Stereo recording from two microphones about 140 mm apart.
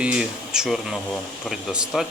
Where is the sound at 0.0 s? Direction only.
5° right (ahead or behind).